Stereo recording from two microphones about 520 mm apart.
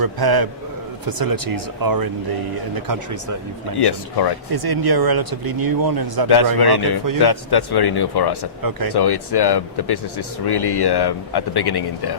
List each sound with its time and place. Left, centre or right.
0.0 s speech: right
3.8 s speech: left
4.5 s speech: right
6.3 s speech: left